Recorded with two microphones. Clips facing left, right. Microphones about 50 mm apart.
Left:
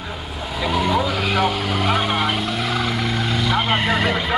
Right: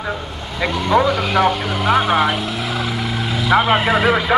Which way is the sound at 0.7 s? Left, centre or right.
Centre.